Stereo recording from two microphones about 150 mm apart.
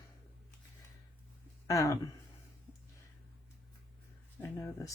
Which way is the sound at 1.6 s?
20° left (ahead or behind).